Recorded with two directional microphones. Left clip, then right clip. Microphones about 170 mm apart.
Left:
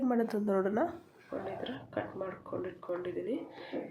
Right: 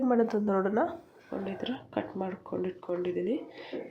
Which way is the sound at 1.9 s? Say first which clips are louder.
Right 2 dB; 45° right (ahead or behind).